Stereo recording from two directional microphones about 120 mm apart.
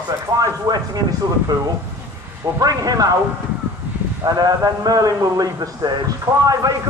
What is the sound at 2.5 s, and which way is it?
Speech, 30° right (ahead or behind).